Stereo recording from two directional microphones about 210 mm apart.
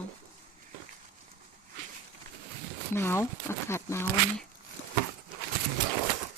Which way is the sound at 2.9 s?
10° left (ahead or behind).